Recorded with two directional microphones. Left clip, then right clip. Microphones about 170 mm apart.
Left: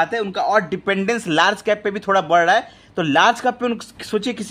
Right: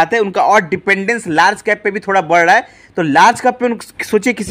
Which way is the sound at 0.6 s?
10° right (ahead or behind).